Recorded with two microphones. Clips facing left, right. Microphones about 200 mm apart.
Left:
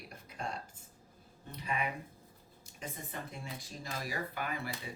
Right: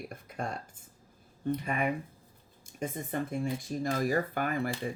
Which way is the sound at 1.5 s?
50° right (ahead or behind).